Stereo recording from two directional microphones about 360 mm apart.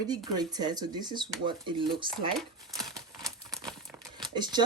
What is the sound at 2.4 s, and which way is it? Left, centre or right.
Speech, centre.